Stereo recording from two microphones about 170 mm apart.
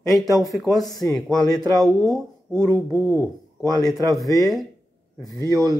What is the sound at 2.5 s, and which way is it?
Speech, 15° right (ahead or behind).